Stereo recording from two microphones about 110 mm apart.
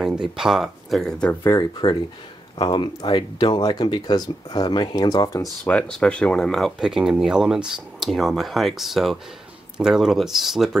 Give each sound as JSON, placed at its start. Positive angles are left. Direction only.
{"t": 0.0, "sound": "speech", "side_deg": -5}
{"t": 1.4, "sound": "speech", "side_deg": 25}
{"t": 2.6, "sound": "speech", "side_deg": 45}
{"t": 5.6, "sound": "speech", "side_deg": 10}